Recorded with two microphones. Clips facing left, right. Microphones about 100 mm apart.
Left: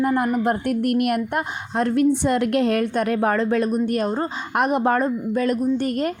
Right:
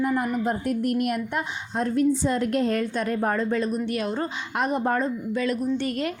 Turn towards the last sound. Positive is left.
turn(degrees=45)  # may be behind; listen again after turning